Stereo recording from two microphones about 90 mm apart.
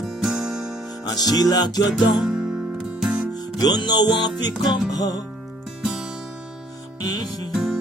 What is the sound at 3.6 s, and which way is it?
Music, 50° left (ahead or behind).